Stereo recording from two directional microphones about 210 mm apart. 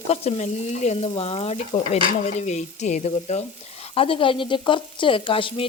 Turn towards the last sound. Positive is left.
turn(degrees=25)  # may be behind; listen again after turning